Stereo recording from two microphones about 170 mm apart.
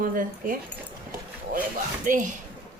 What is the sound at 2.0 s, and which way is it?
Speech, 50° right (ahead or behind).